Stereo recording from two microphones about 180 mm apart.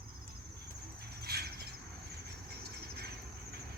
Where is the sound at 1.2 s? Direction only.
60° right (ahead or behind).